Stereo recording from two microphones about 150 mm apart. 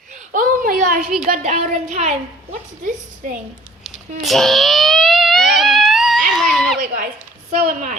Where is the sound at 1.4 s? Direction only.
50° right (ahead or behind).